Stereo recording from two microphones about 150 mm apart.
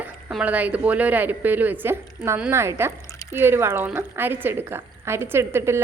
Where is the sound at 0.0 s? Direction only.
5° right (ahead or behind).